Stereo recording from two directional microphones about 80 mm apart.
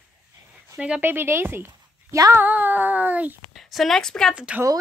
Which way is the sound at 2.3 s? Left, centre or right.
Right.